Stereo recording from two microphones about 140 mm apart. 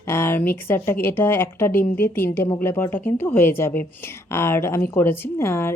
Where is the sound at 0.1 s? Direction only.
15° left (ahead or behind).